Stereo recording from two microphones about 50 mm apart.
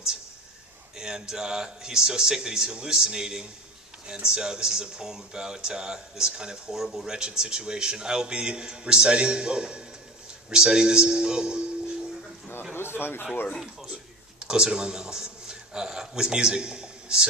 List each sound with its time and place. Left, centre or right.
0.9 s speech: centre
12.7 s a sound: left
14.4 s a man's voice: centre